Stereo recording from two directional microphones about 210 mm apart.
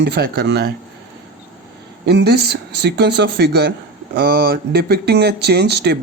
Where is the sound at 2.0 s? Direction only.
50° right (ahead or behind).